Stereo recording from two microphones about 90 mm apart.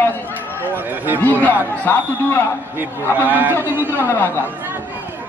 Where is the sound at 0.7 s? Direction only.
20° right (ahead or behind).